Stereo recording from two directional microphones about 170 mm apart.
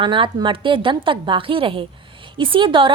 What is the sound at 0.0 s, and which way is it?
A woman's voice, 30° right (ahead or behind).